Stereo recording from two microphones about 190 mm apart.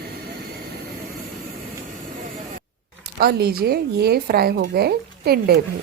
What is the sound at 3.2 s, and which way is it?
A woman's voice, 55° right (ahead or behind).